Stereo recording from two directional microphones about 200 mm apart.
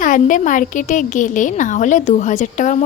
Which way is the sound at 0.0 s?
40° left (ahead or behind).